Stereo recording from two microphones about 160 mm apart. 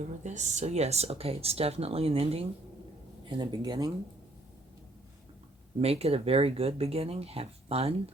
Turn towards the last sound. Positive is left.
turn(degrees=-40)  # may be behind; listen again after turning